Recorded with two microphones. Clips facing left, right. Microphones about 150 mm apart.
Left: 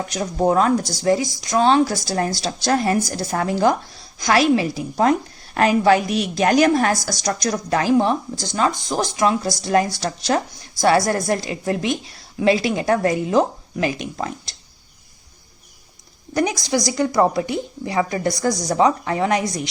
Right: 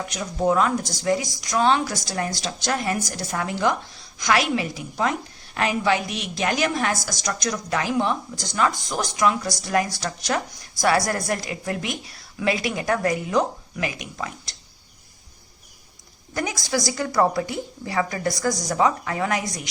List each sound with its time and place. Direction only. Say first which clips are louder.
0.0 s a woman's voice: left 4 dB; 35° left (ahead or behind)
16.3 s a woman's voice: left 6 dB; 20° left (ahead or behind)